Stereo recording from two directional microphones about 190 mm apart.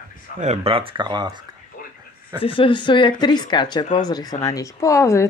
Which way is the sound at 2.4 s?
30° left (ahead or behind).